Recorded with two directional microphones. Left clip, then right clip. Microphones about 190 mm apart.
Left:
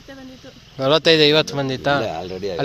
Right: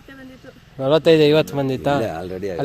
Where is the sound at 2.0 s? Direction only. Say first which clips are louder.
Even; 60° right (ahead or behind).